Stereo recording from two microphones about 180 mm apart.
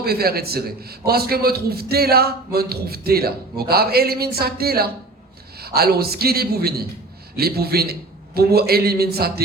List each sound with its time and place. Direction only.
0.0 s a man's voice: 60° right (ahead or behind)